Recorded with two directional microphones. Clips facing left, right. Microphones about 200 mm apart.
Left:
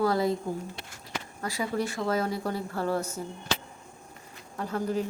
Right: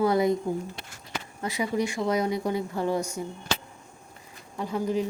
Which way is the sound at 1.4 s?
20° right (ahead or behind).